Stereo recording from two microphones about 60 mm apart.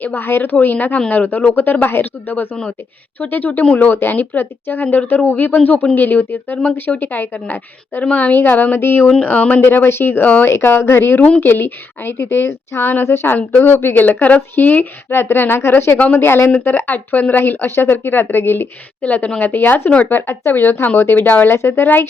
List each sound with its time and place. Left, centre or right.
0.0 s speech: left
9.2 s speech: left
9.6 s speech: left
10.4 s speech: left
16.0 s speech: left
16.2 s speech: left
19.0 s speech: left